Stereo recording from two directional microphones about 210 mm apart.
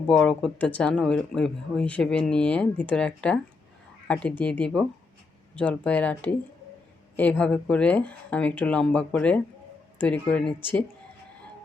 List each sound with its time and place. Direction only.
0.1 s speech: 5° left (ahead or behind)